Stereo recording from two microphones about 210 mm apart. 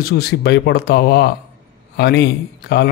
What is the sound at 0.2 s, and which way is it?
A man's voice, 50° left (ahead or behind).